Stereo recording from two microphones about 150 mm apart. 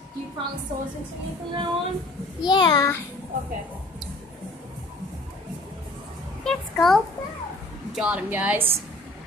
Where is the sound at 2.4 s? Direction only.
30° left (ahead or behind).